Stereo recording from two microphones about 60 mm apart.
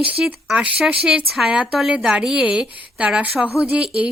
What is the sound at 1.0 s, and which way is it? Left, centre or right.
Speech, centre.